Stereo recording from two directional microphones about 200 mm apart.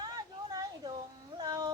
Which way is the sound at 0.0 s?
20° right (ahead or behind).